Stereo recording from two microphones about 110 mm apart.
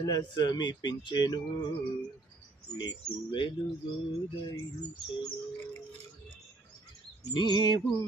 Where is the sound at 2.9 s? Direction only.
45° left (ahead or behind).